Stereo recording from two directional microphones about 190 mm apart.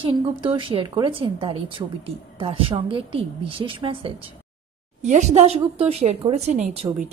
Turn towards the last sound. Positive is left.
turn(degrees=-35)  # may be behind; listen again after turning